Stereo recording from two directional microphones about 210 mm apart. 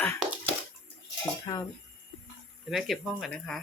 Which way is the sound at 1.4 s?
20° left (ahead or behind).